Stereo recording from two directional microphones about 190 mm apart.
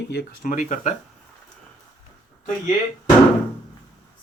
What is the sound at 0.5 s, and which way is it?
Speech, 40° left (ahead or behind).